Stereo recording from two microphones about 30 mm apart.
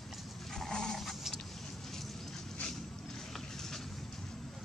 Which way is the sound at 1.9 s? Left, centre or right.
Centre.